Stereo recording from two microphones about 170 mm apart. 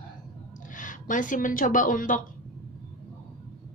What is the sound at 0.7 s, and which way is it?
A woman's voice, 50° left (ahead or behind).